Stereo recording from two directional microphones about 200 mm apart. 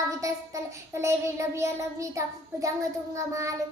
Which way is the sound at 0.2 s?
15° right (ahead or behind).